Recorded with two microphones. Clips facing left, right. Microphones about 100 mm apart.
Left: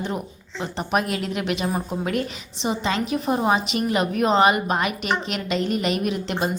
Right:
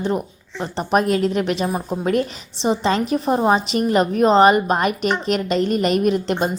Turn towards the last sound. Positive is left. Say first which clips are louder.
# right 6 dB
turn(degrees=-45)  # may be behind; listen again after turning